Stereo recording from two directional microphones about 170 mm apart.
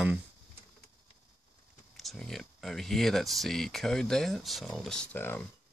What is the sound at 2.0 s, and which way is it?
Speech, centre (ahead or behind).